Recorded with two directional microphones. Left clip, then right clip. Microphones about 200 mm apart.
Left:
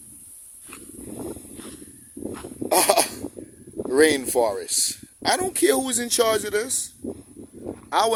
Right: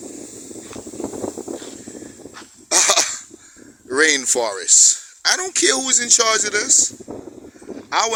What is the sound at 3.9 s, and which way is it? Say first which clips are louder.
Speech: right 2 dB; 15° left (ahead or behind).